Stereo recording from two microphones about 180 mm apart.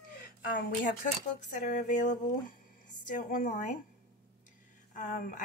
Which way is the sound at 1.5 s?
45° left (ahead or behind).